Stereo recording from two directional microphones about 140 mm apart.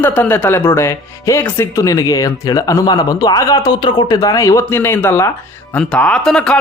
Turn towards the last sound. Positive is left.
turn(degrees=5)  # may be behind; listen again after turning